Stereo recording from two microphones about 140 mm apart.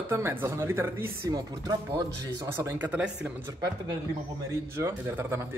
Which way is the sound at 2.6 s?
15° right (ahead or behind).